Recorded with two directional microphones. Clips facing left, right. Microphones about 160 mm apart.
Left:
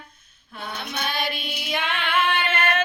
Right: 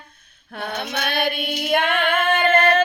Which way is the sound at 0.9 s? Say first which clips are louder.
Right 4 dB; 65° right (ahead or behind).